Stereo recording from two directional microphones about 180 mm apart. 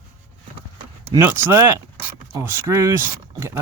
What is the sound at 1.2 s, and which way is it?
Speech, 10° right (ahead or behind).